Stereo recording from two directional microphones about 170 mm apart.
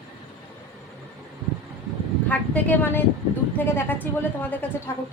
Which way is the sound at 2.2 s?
10° left (ahead or behind).